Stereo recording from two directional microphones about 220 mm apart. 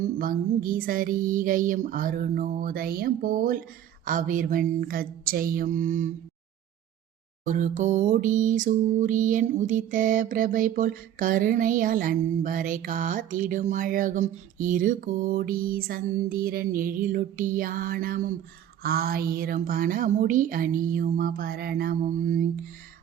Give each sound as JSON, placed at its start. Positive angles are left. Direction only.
{"t": 0.0, "sound": "music", "side_deg": -40}
{"t": 7.4, "sound": "music", "side_deg": -35}